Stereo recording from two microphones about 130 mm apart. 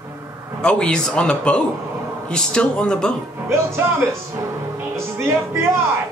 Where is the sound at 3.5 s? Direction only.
20° right (ahead or behind).